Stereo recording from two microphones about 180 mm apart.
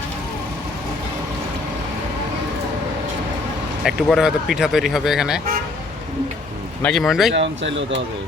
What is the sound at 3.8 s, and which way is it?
Speech, centre (ahead or behind).